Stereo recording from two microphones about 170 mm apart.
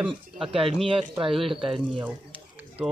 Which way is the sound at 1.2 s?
30° right (ahead or behind).